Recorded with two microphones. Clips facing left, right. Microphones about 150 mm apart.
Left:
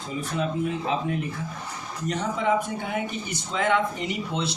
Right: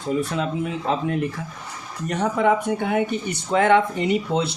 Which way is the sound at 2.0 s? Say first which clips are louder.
Right 5 dB; 65° right (ahead or behind).